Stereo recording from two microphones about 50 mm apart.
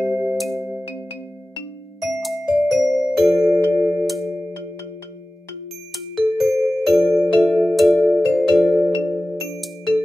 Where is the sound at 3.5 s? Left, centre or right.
Left.